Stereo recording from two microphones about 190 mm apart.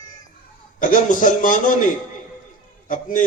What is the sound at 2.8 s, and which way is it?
Speech, 45° left (ahead or behind).